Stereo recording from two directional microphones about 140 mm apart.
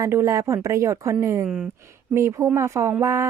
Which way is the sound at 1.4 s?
5° right (ahead or behind).